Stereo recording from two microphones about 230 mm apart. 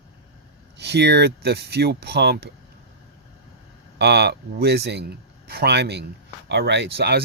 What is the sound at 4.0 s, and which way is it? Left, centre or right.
Speech, right.